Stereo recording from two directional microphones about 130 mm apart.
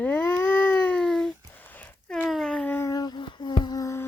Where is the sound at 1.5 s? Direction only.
15° left (ahead or behind).